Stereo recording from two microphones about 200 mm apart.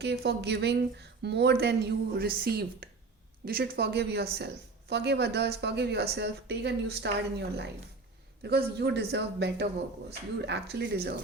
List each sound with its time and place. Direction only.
0.0 s a man's voice: 55° right (ahead or behind)